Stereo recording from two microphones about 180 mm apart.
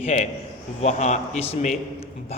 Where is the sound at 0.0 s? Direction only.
35° left (ahead or behind).